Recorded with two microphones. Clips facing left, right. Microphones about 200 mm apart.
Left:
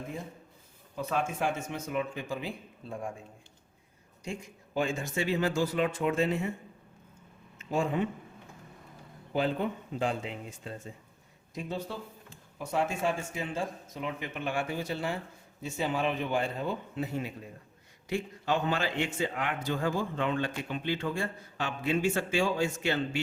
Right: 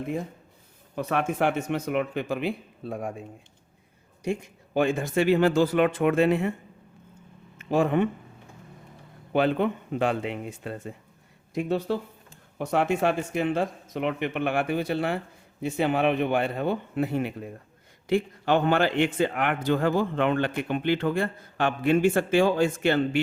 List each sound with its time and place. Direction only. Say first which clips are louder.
0.9 s a man's voice: right 6 dB; 65° right (ahead or behind)
4.3 s a man's voice: right 10 dB; 65° right (ahead or behind)
7.7 s a man's voice: right 7 dB; 65° right (ahead or behind)
9.3 s a man's voice: right 6 dB; 70° right (ahead or behind)